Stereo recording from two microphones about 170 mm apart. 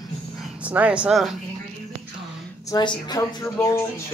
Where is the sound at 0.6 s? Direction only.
10° right (ahead or behind).